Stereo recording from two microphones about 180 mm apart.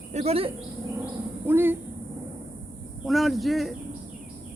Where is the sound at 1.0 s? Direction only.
10° right (ahead or behind).